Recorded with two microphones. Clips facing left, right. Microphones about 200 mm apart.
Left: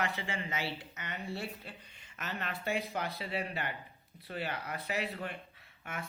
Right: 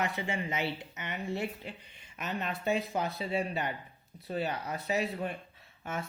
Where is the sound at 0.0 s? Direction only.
20° right (ahead or behind).